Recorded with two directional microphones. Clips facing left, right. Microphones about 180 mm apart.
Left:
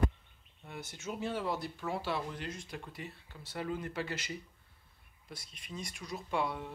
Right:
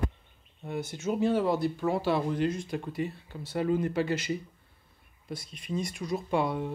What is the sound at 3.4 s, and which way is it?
Speech, 25° right (ahead or behind).